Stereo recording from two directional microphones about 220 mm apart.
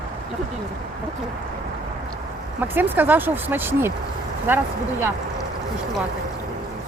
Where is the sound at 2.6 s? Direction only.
10° right (ahead or behind).